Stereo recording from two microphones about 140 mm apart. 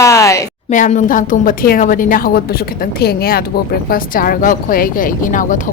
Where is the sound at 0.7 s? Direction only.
65° left (ahead or behind).